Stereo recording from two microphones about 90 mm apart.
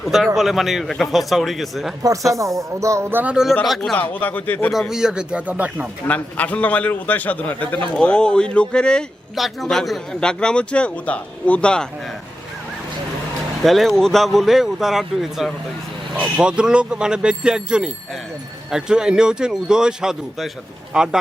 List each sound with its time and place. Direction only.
0.0 s speech: 5° right (ahead or behind)
2.3 s speech: 35° right (ahead or behind)
3.1 s speech: 20° right (ahead or behind)
3.9 s speech: 20° left (ahead or behind)
4.7 s speech: 5° right (ahead or behind)
6.1 s a man's voice: 15° left (ahead or behind)
9.3 s a man's voice: centre (ahead or behind)
13.6 s speech: centre (ahead or behind)